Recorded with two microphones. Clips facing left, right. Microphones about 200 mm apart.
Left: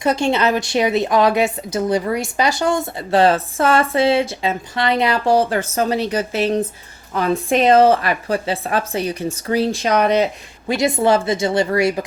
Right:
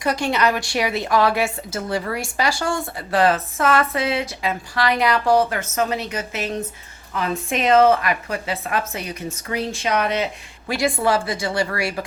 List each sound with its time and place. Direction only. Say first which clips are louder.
0.0 s a woman's voice: left 3 dB; 25° left (ahead or behind)
10.7 s a woman's voice: left 4 dB; 20° left (ahead or behind)